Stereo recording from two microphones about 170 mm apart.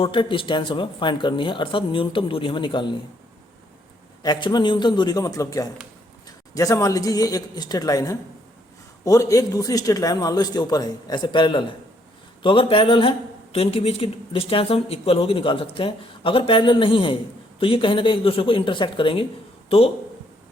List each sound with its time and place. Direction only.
0.0 s speech: 30° left (ahead or behind)
4.2 s a man's voice: 25° left (ahead or behind)